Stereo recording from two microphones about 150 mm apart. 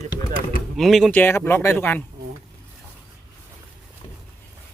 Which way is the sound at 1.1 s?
10° left (ahead or behind).